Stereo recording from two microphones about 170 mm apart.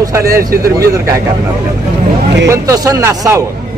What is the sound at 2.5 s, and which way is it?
Speech, 20° right (ahead or behind).